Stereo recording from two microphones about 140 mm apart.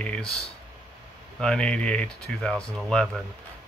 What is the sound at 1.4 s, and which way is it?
Speech, 5° left (ahead or behind).